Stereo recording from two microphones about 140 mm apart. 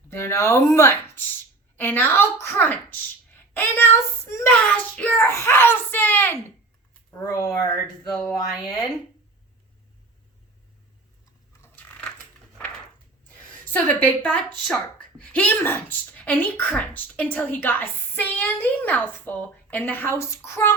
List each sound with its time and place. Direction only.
0.1 s a woman's voice: 20° left (ahead or behind)
11.6 s crushing: 15° left (ahead or behind)
13.2 s speech: 10° left (ahead or behind)